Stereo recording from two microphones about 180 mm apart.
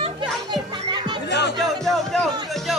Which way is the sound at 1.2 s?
70° left (ahead or behind).